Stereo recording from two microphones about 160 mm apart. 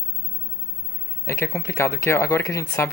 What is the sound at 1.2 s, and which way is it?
Speech, 15° left (ahead or behind).